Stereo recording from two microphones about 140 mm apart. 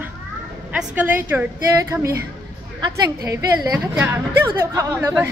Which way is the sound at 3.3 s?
20° right (ahead or behind).